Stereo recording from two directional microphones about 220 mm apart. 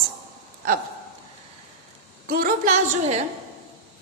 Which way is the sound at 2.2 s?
40° right (ahead or behind).